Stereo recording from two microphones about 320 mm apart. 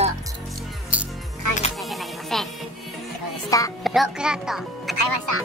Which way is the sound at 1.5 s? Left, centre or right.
Right.